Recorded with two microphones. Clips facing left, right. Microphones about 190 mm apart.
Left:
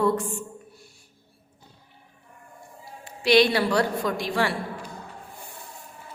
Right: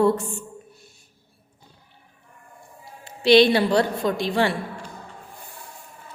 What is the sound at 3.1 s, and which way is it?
A woman's voice, 25° right (ahead or behind).